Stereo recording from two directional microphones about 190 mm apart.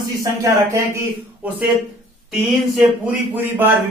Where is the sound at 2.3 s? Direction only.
5° right (ahead or behind).